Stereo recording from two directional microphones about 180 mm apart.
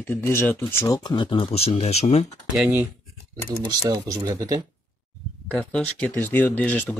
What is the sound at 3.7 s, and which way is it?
Speech, 20° right (ahead or behind).